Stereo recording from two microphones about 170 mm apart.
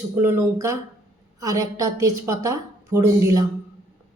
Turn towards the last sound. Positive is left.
turn(degrees=-20)  # may be behind; listen again after turning